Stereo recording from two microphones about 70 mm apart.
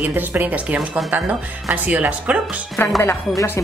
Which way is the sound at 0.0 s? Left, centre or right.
Right.